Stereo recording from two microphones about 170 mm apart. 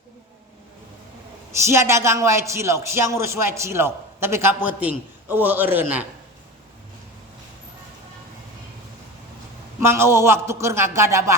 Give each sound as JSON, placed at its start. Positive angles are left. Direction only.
{"t": 1.6, "sound": "speech", "side_deg": -15}
{"t": 9.8, "sound": "speech", "side_deg": -15}